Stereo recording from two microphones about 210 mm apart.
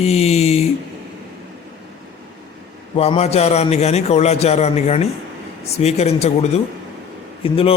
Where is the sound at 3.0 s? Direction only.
30° left (ahead or behind).